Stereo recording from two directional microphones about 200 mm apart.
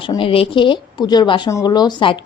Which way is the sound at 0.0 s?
25° left (ahead or behind).